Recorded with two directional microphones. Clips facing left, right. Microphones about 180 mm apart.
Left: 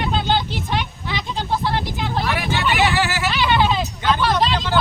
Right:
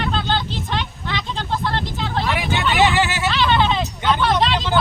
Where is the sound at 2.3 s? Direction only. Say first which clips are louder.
Right 1 dB; 20° right (ahead or behind).